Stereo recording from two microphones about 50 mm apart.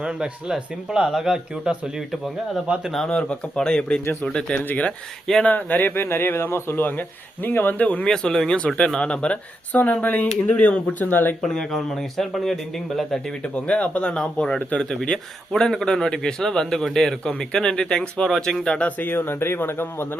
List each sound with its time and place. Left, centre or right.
0.0 s speech: centre
2.7 s speech: right
3.1 s speech: left
5.9 s speech: left
7.8 s speech: left
8.0 s speech: centre
11.1 s speech: left
11.4 s speech: centre
13.4 s speech: left
18.8 s speech: left